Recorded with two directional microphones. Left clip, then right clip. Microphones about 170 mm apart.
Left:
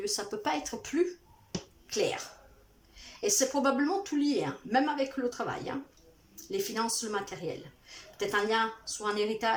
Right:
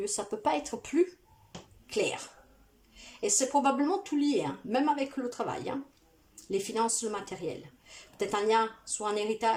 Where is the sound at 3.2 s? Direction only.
20° right (ahead or behind).